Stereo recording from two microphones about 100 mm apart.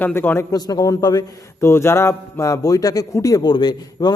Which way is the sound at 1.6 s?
25° left (ahead or behind).